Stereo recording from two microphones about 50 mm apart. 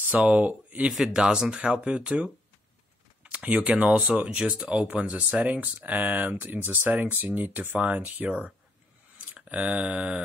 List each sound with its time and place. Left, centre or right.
0.1 s speech: right
0.9 s speech: centre
3.4 s speech: right
7.8 s speech: right
9.3 s a sound: right